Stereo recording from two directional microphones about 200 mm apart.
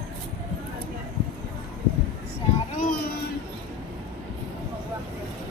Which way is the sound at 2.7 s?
45° left (ahead or behind).